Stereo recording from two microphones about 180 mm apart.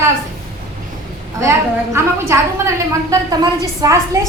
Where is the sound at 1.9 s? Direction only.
15° right (ahead or behind).